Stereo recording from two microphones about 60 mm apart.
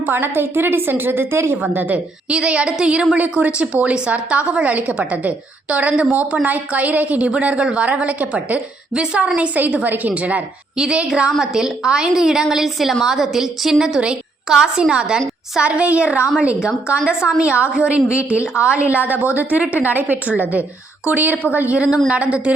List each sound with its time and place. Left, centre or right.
0.0 s a woman's voice: right
1.7 s a woman's voice: right
2.3 s a woman's voice: centre
10.8 s a woman's voice: centre